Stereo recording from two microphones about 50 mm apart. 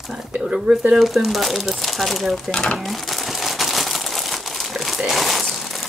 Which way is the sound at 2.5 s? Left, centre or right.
Left.